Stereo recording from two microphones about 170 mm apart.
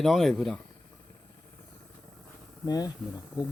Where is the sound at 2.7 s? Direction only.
20° left (ahead or behind).